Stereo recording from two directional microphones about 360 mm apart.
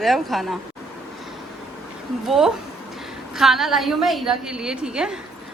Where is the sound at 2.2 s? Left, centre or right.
Centre.